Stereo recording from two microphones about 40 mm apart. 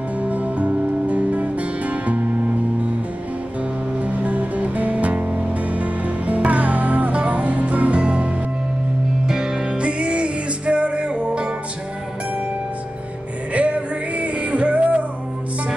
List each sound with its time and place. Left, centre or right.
0.2 s music: right
4.0 s music: right
9.2 s music: centre
13.5 s music: right